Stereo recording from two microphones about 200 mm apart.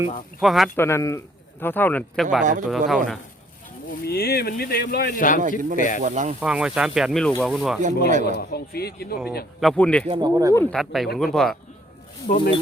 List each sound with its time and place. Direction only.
0.3 s speech: centre (ahead or behind)
0.8 s speech: 15° left (ahead or behind)
2.4 s speech: 40° right (ahead or behind)
2.6 s speech: centre (ahead or behind)
4.0 s speech: 50° left (ahead or behind)
5.4 s speech: 40° right (ahead or behind)
5.7 s speech: 40° left (ahead or behind)
6.0 s speech: 35° right (ahead or behind)
6.4 s speech: 5° right (ahead or behind)
8.2 s speech: 55° left (ahead or behind)
9.6 s speech: 5° left (ahead or behind)
10.1 s speech: 20° right (ahead or behind)
10.5 s speech: 5° left (ahead or behind)
12.3 s speech: 40° left (ahead or behind)